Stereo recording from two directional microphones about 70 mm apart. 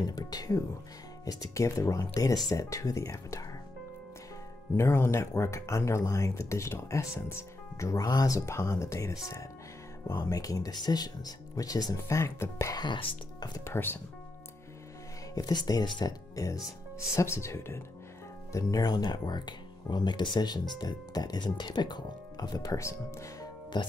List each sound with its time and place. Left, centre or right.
0.1 s speech: left
1.2 s speech: left
4.7 s speech: left
10.1 s speech: left
13.7 s speech: left
15.3 s speech: left
16.0 s speech: left
17.1 s speech: left
18.5 s speech: left
20.7 s speech: left
22.8 s speech: left
23.7 s speech: left